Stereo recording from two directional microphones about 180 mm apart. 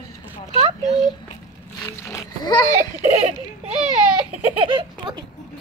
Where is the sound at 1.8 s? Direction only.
15° left (ahead or behind).